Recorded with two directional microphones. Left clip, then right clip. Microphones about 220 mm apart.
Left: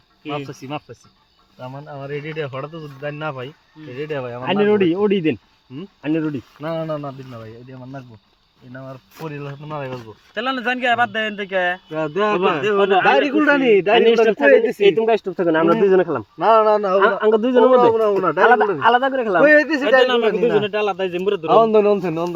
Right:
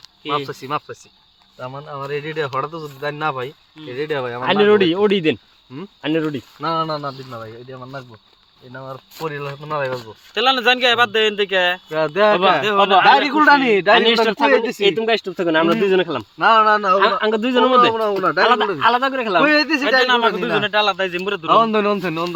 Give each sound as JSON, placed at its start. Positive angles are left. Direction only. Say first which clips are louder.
{"t": 0.3, "sound": "speech", "louder": "right 5 dB", "side_deg": -15}
{"t": 4.6, "sound": "speech", "louder": "right 2 dB", "side_deg": 5}
{"t": 6.6, "sound": "speech", "louder": "right 4 dB", "side_deg": -20}
{"t": 8.7, "sound": "speech", "louder": "right 3 dB", "side_deg": -25}
{"t": 9.9, "sound": "a man's voice", "louder": "right 4 dB", "side_deg": -40}
{"t": 11.9, "sound": "speech", "louder": "right 5 dB", "side_deg": -25}
{"t": 12.6, "sound": "speech", "louder": "right 2 dB", "side_deg": -45}
{"t": 13.4, "sound": "speech", "louder": "right 2 dB", "side_deg": -15}
{"t": 15.7, "sound": "speech", "louder": "left 2 dB", "side_deg": -5}
{"t": 16.4, "sound": "speech", "louder": "right 1 dB", "side_deg": -25}
{"t": 16.9, "sound": "speech", "louder": "even", "side_deg": -5}
{"t": 17.9, "sound": "speech", "louder": "left 1 dB", "side_deg": -10}
{"t": 20.1, "sound": "speech", "louder": "left 1 dB", "side_deg": -25}
{"t": 21.6, "sound": "speech", "louder": "left 3 dB", "side_deg": -10}